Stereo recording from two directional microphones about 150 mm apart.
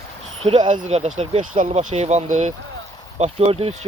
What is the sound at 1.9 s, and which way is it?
Speech, 50° right (ahead or behind).